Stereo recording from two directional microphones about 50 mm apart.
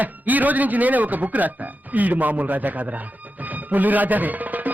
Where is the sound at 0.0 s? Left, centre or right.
Right.